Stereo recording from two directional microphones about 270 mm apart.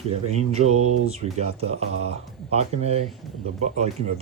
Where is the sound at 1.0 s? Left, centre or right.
Right.